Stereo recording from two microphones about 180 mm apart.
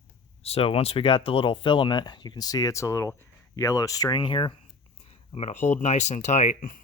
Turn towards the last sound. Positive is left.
turn(degrees=45)  # may be behind; listen again after turning